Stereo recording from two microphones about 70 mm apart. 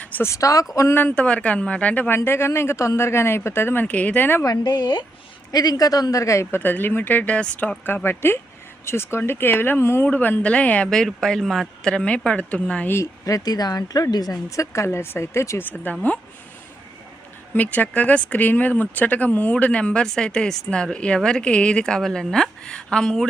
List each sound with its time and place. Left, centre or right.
0.2 s speech: left
0.9 s speech: left
3.8 s speech: left
4.6 s speech: left
5.5 s speech: left
8.8 s speech: left; by 10.8 s centre
10.8 s speech: centre
12.9 s speech: left
14.5 s speech: left
15.7 s speech: left
17.5 s speech: left